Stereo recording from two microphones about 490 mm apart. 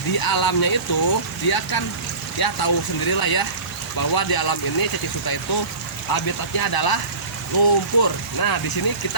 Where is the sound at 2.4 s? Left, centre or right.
Left.